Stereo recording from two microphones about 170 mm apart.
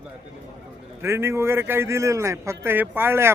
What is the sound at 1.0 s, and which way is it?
Speech, 15° right (ahead or behind).